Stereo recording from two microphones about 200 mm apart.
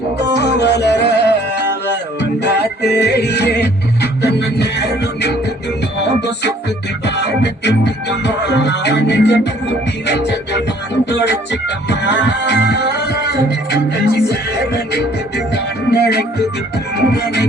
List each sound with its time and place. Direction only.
0.3 s music: 55° left (ahead or behind)
7.0 s music: 60° left (ahead or behind)